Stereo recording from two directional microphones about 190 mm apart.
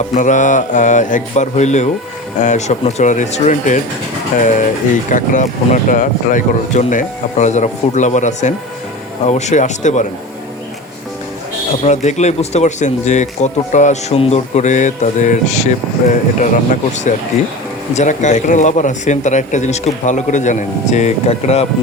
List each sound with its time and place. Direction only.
0.1 s speech: 40° left (ahead or behind)
5.1 s speech: 40° left (ahead or behind)
11.8 s speech: 35° left (ahead or behind)
17.9 s speech: 40° left (ahead or behind)